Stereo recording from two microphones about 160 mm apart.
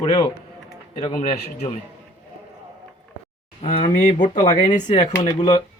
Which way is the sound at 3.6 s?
40° left (ahead or behind).